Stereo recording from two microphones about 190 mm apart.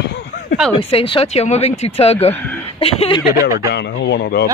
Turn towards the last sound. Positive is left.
turn(degrees=60)  # may be behind; listen again after turning